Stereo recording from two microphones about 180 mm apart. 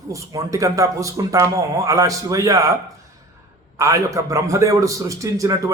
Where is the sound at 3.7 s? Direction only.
15° right (ahead or behind).